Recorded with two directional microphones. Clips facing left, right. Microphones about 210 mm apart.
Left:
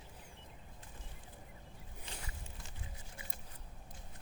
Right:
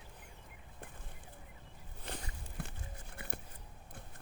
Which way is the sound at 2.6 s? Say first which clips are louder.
Right 6 dB; 60° right (ahead or behind).